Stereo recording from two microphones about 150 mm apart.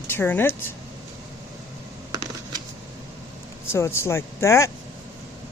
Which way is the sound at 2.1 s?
25° right (ahead or behind).